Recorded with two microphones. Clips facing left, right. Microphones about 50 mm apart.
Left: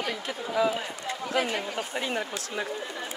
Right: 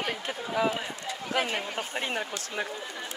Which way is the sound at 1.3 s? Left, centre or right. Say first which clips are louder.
Left 1 dB; right.